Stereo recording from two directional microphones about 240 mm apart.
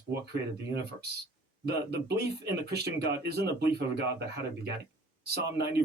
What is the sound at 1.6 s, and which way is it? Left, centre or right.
Speech, right.